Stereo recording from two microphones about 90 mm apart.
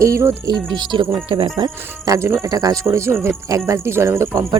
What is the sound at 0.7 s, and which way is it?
Speech, 55° right (ahead or behind).